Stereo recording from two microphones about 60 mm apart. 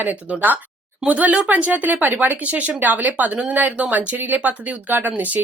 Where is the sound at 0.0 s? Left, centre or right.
Right.